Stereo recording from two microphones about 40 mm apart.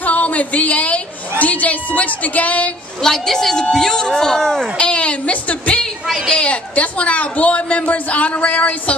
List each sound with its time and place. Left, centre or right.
0.0 s a sound: left
1.4 s speech: left
3.0 s speech: centre
4.7 s a woman's voice: left
6.0 s a woman's voice: centre
6.3 s speech: left